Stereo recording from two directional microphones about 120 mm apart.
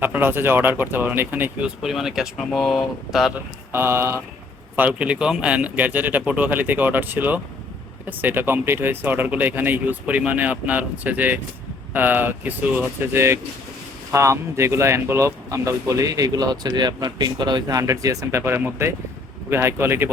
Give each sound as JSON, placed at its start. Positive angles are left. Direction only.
{"t": 0.0, "sound": "speech", "side_deg": -15}
{"t": 1.8, "sound": "speech", "side_deg": -5}
{"t": 3.7, "sound": "speech", "side_deg": -20}